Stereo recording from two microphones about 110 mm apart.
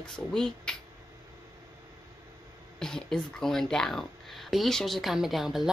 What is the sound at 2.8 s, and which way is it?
Speech, 5° left (ahead or behind).